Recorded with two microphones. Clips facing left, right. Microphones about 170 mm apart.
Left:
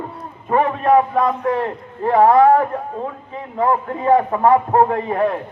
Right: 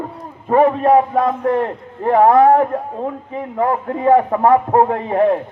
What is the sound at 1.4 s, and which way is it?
A man's voice, 55° right (ahead or behind).